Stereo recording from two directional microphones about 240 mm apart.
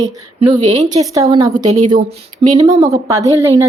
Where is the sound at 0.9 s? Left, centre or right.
Centre.